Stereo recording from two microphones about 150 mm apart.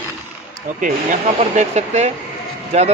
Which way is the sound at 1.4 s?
50° right (ahead or behind).